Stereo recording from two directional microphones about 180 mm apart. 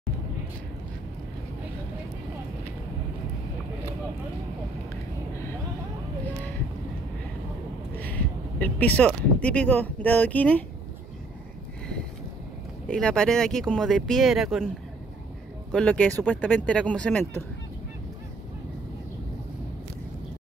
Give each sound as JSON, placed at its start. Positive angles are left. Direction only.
{"t": 8.0, "sound": "speech", "side_deg": 10}
{"t": 12.8, "sound": "speech", "side_deg": 5}
{"t": 15.7, "sound": "speech", "side_deg": 5}